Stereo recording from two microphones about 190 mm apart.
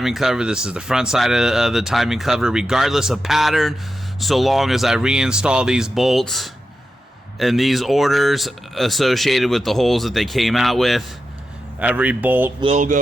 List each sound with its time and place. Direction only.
0.0 s speech: centre (ahead or behind)
12.6 s speech: 40° right (ahead or behind)